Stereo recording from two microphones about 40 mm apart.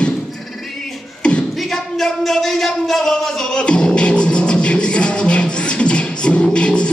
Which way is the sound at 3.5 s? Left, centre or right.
Left.